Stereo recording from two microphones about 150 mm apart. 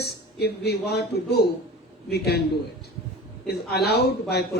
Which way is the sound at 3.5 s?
90° left.